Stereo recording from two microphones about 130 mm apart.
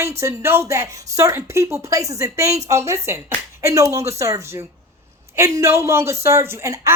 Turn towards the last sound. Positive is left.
turn(degrees=-25)  # may be behind; listen again after turning